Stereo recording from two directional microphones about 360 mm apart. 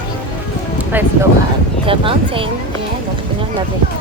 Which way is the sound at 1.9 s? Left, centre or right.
Centre.